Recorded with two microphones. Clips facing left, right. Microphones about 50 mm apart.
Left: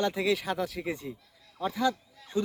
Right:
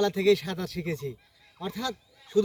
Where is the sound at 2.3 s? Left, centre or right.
Left.